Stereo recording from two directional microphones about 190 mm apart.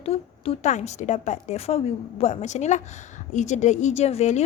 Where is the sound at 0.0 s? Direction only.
30° left (ahead or behind).